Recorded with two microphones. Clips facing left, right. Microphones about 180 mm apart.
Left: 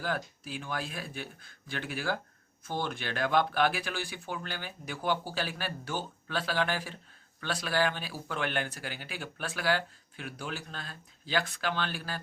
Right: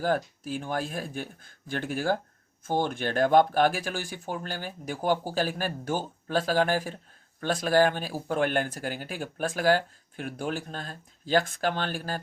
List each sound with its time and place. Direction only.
0.0 s speech: 45° right (ahead or behind)